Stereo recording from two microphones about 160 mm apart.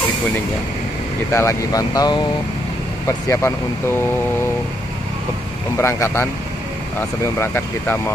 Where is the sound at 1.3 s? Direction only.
20° left (ahead or behind).